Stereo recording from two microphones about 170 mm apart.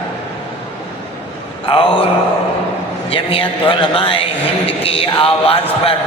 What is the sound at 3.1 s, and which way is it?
A man's voice, 35° left (ahead or behind).